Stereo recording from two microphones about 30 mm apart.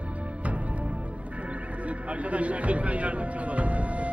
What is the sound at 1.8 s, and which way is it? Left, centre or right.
Music, right.